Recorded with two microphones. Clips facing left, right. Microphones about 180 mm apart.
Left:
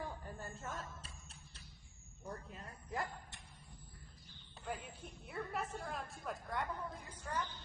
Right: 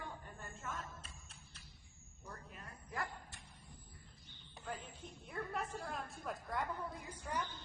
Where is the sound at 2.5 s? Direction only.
25° left (ahead or behind).